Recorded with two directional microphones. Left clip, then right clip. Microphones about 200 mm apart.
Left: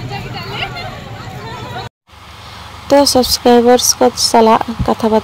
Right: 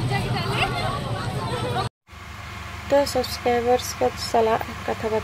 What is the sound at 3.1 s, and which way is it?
Speech, 35° left (ahead or behind).